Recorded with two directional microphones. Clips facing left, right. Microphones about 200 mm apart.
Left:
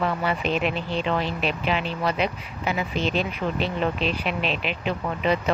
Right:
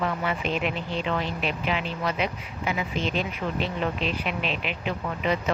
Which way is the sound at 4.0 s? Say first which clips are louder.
Left 3 dB; 30° left (ahead or behind).